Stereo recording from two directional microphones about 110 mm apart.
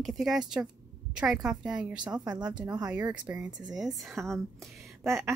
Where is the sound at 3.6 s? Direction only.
5° right (ahead or behind).